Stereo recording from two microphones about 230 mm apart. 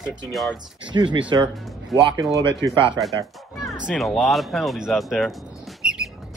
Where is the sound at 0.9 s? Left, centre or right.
Right.